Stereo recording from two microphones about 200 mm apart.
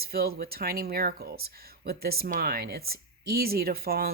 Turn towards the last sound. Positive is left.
turn(degrees=-50)  # may be behind; listen again after turning